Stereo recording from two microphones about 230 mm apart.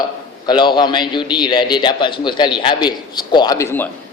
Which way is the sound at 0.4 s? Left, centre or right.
Centre.